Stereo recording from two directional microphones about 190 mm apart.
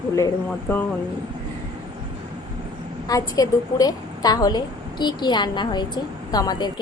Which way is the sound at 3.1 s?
20° left (ahead or behind).